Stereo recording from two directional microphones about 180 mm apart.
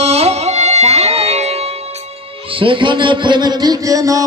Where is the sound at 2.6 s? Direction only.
30° right (ahead or behind).